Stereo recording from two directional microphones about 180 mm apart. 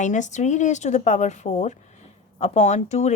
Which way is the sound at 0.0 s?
40° left (ahead or behind).